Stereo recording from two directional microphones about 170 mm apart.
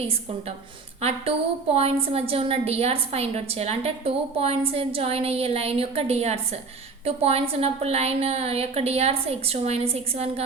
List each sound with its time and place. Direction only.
0.0 s a woman's voice: 35° right (ahead or behind)